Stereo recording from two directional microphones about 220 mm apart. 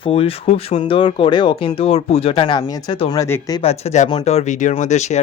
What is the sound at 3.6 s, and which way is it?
Speech, 30° left (ahead or behind).